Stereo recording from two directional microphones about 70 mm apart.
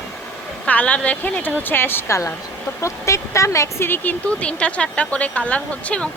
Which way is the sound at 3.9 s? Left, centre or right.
Left.